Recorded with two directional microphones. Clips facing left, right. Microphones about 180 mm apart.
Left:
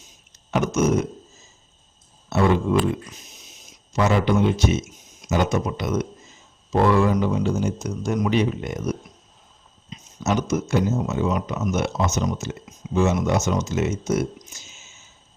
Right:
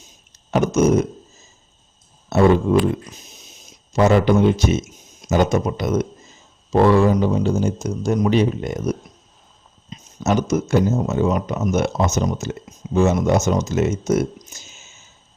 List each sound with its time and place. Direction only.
0.5 s speech: 40° right (ahead or behind)
2.3 s speech: 40° right (ahead or behind)
3.9 s speech: 40° right (ahead or behind)
10.5 s speech: 40° right (ahead or behind)